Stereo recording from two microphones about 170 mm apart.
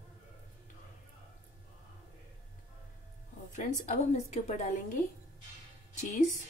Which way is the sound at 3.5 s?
45° left (ahead or behind).